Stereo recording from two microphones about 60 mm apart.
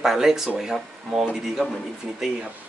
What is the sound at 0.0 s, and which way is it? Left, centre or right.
Speech, centre.